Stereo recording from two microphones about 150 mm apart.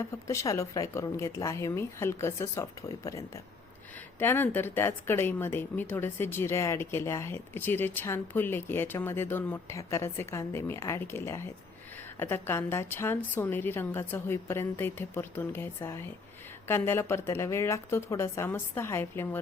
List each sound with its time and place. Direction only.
0.0 s a woman's voice: 20° left (ahead or behind)